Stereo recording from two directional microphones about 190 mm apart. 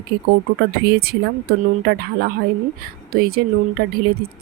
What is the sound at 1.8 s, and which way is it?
Speech, 55° right (ahead or behind).